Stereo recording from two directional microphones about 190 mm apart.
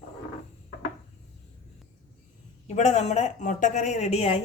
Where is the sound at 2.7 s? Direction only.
35° left (ahead or behind).